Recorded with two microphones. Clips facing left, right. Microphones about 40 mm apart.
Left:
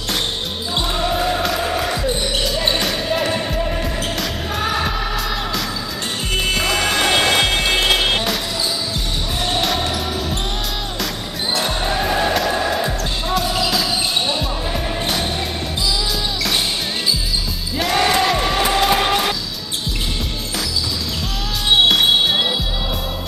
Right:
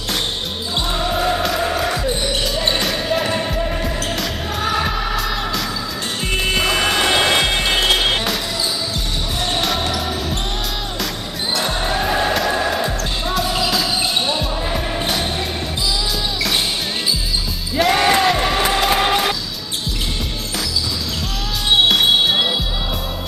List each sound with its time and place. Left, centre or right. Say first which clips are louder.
0.9 s basketball bounce: right 1 dB; centre
6.3 s music: right 1 dB; centre
9.5 s basketball bounce: left 1 dB; centre
11.6 s music: right 1 dB; centre
17.7 s music: right 2 dB; centre
21.8 s music: right 1 dB; centre